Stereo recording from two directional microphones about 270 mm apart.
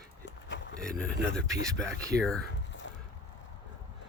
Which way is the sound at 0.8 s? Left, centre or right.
Centre.